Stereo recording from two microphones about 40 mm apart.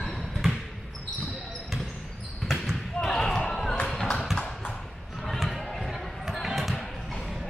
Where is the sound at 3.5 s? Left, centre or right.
Centre.